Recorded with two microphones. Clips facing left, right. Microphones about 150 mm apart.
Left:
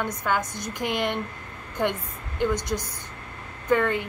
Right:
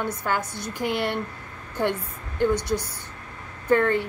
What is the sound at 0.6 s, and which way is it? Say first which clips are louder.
Speech: right 1 dB; 15° left (ahead or behind).